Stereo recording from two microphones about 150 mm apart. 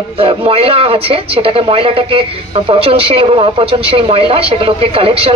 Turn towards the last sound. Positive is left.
turn(degrees=-40)  # may be behind; listen again after turning